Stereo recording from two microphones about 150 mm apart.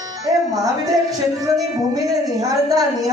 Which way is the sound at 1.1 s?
25° right (ahead or behind).